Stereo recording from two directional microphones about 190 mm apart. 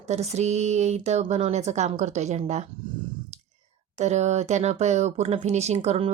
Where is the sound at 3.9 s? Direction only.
35° right (ahead or behind).